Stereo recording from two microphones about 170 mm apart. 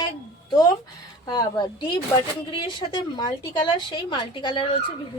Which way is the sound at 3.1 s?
25° left (ahead or behind).